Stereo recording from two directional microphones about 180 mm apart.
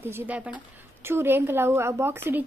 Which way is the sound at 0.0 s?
10° right (ahead or behind).